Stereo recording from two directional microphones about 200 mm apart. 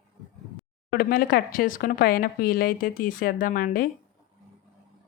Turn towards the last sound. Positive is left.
turn(degrees=45)  # may be behind; listen again after turning